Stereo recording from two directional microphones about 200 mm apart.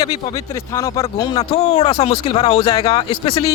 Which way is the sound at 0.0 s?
15° left (ahead or behind).